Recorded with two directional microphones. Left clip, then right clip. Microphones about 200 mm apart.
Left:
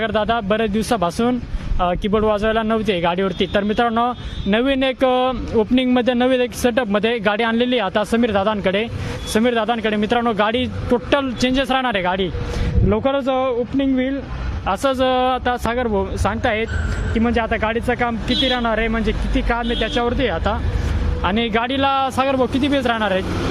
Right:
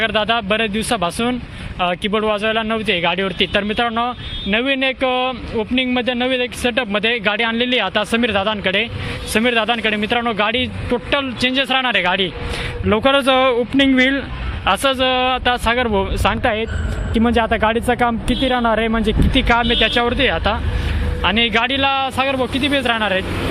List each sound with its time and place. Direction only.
0.0 s speech: 20° left (ahead or behind)
12.9 s speech: 5° left (ahead or behind)
14.8 s speech: 20° left (ahead or behind); by 16.6 s centre (ahead or behind)
17.2 s speech: 15° right (ahead or behind)
20.0 s speech: 5° left (ahead or behind)